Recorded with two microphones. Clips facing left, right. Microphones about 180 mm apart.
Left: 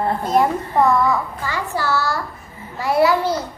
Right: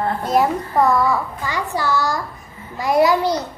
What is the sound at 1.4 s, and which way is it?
A child's voice, 15° right (ahead or behind).